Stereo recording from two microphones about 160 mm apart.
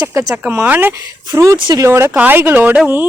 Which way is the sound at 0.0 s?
20° right (ahead or behind).